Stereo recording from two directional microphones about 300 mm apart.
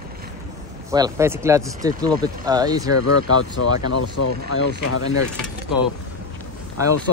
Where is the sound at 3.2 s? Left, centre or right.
Left.